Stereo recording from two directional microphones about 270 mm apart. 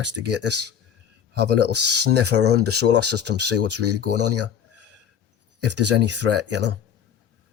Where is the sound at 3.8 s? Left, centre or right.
Right.